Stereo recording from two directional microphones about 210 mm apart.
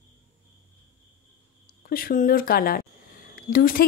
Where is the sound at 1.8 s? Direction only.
45° left (ahead or behind).